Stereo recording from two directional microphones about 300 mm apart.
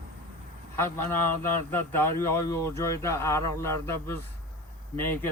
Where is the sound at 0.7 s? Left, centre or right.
Centre.